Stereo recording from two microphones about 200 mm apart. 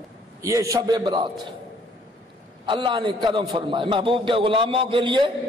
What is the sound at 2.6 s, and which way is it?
A man's voice, 25° right (ahead or behind).